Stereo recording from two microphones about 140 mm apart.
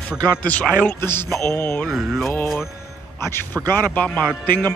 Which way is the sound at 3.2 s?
15° left (ahead or behind).